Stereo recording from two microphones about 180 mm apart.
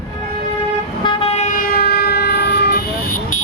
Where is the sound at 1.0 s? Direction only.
35° left (ahead or behind); by 3.4 s 55° left (ahead or behind).